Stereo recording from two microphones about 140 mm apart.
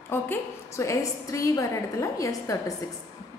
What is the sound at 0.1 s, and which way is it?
A woman's voice, 20° left (ahead or behind).